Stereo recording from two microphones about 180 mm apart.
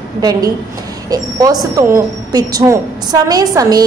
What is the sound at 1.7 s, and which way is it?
A woman's voice, 20° right (ahead or behind).